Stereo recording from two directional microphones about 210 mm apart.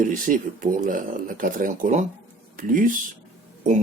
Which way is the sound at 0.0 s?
40° right (ahead or behind).